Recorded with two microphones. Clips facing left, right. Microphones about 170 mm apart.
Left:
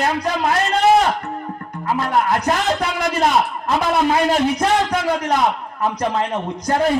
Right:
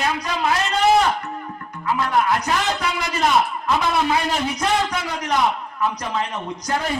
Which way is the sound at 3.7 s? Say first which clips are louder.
Left 3 dB; 50° left (ahead or behind).